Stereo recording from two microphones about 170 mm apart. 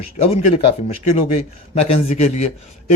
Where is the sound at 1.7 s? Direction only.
35° left (ahead or behind).